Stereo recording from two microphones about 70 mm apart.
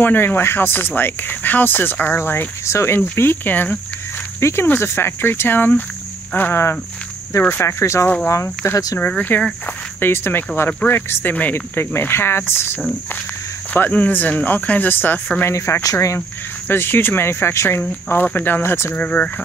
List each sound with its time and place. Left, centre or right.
0.0 s speech: left
4.4 s speech: left
9.3 s speech: left
13.7 s speech: left
15.5 s speech: left
16.6 s speech: left
18.9 s speech: centre